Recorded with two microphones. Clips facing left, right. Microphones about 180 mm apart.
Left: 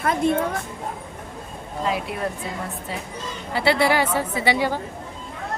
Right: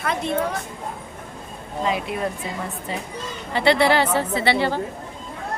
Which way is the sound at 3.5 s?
10° left (ahead or behind).